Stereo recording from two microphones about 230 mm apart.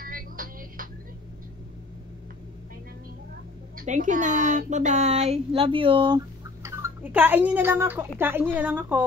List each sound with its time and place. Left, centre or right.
0.0 s music: right
3.7 s a woman's voice: right; by 9.0 s centre